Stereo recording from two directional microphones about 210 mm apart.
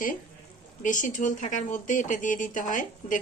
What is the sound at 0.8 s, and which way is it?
Speech, 35° left (ahead or behind).